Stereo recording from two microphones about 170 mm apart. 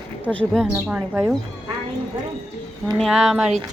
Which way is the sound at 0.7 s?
5° right (ahead or behind).